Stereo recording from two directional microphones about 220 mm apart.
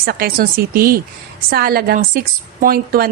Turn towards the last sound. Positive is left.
turn(degrees=-45)  # may be behind; listen again after turning